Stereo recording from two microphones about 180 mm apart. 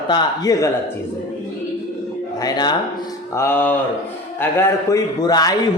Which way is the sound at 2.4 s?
20° left (ahead or behind).